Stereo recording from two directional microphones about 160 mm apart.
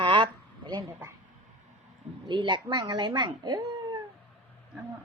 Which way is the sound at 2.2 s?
30° right (ahead or behind).